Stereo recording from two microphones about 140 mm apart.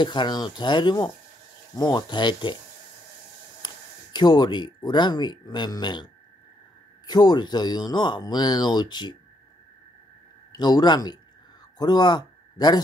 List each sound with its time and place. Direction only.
0.0 s speech: 35° left (ahead or behind)
3.6 s speech: 30° left (ahead or behind)
7.1 s speech: 30° left (ahead or behind)
10.5 s a man's voice: 30° left (ahead or behind)